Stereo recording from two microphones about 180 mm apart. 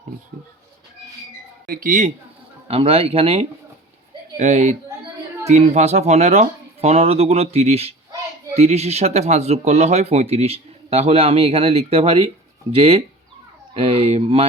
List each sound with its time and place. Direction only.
1.6 s speech: 50° right (ahead or behind)
2.6 s speech: 35° right (ahead or behind)